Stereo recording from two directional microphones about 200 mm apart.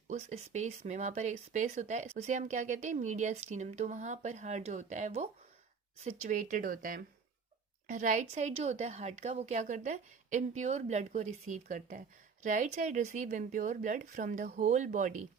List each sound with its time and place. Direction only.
0.1 s a woman's voice: 35° right (ahead or behind)